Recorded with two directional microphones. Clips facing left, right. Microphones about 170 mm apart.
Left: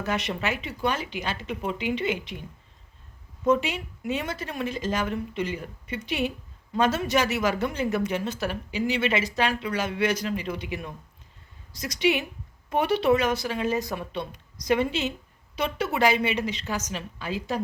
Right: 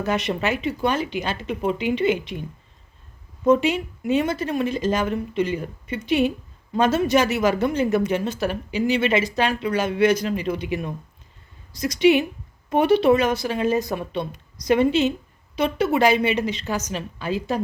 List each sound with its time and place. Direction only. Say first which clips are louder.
0.1 s speech: right 5 dB; 20° right (ahead or behind)
3.4 s speech: right 5 dB; 25° right (ahead or behind)
11.8 s speech: right 8 dB; 20° right (ahead or behind)